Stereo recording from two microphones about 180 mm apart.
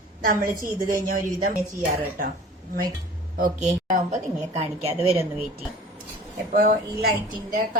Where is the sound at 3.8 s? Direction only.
45° right (ahead or behind).